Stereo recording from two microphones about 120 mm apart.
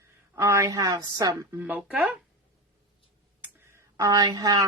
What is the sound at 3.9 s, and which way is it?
Speech, 30° right (ahead or behind).